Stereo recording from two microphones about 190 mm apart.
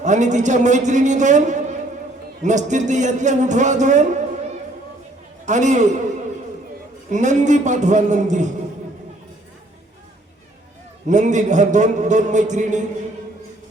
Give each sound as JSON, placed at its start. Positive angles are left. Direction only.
{"t": 0.0, "sound": "a man's voice", "side_deg": -40}
{"t": 5.5, "sound": "a man's voice", "side_deg": -40}
{"t": 7.1, "sound": "a man's voice", "side_deg": -40}
{"t": 11.0, "sound": "a man's voice", "side_deg": -40}